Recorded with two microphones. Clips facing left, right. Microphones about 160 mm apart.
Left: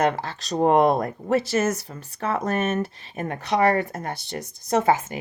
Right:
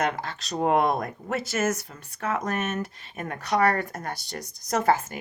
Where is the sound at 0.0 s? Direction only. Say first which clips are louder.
Left 5 dB; 35° left (ahead or behind).